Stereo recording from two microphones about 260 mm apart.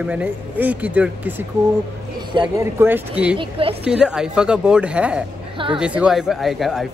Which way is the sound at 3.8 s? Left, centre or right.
Centre.